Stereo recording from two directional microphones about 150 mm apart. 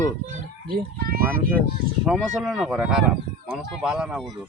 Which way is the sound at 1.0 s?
80° right.